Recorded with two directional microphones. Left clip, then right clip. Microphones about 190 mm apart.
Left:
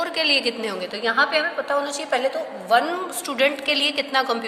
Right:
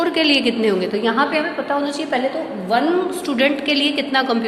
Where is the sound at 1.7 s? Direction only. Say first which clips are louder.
Right 3 dB; 30° left (ahead or behind).